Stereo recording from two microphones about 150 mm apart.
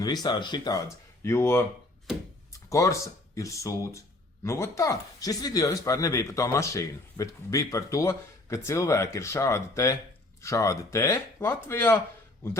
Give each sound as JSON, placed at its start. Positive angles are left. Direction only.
{"t": 0.0, "sound": "speech", "side_deg": 25}
{"t": 1.2, "sound": "speech", "side_deg": 15}